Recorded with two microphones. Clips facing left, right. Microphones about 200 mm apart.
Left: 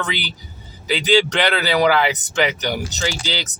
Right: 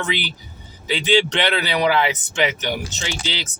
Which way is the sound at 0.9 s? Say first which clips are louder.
Left 1 dB; 40° left (ahead or behind).